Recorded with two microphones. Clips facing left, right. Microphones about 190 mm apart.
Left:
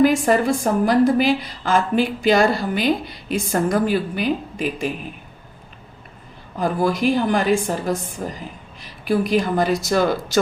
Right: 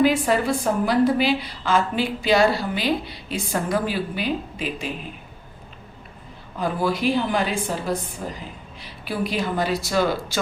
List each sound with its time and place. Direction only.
0.0 s a woman's voice: 45° left (ahead or behind)
6.6 s a woman's voice: 45° left (ahead or behind)